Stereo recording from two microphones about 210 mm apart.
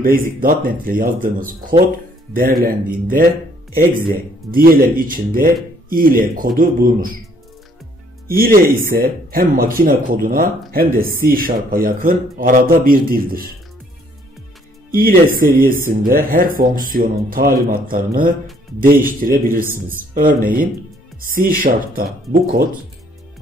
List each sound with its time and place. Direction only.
0.0 s speech: 45° right (ahead or behind)
8.4 s speech: 45° right (ahead or behind)
14.9 s speech: 45° right (ahead or behind)